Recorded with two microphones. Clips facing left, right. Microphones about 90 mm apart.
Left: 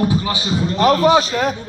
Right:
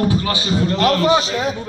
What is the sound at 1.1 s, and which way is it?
Speech, 50° left (ahead or behind).